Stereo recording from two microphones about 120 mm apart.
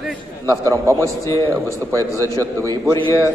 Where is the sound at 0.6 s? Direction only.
25° right (ahead or behind).